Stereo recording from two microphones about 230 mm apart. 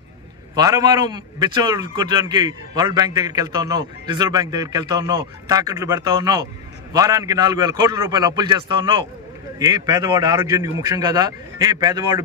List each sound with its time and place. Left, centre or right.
0.6 s a man's voice: centre